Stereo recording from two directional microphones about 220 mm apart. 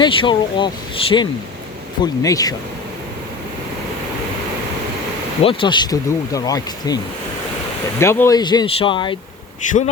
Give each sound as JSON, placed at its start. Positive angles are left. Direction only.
{"t": 0.0, "sound": "speech", "side_deg": 20}
{"t": 5.4, "sound": "speech", "side_deg": 25}